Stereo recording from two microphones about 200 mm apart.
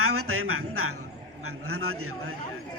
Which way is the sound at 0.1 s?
90° right.